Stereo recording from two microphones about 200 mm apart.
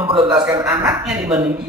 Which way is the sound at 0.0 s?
25° right (ahead or behind).